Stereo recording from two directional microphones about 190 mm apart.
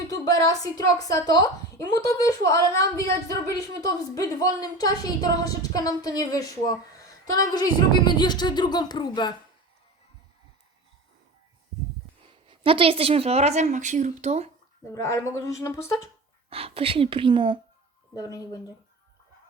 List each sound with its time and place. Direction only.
0.1 s a woman's voice: 20° left (ahead or behind)
12.3 s a woman's voice: 25° right (ahead or behind)
14.8 s speech: 15° left (ahead or behind)
16.5 s a woman's voice: 30° right (ahead or behind)
18.1 s speech: 20° left (ahead or behind)